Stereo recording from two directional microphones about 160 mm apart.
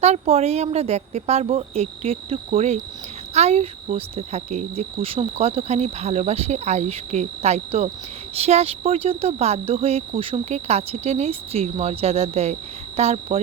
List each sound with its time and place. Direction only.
0.0 s speech: 40° right (ahead or behind)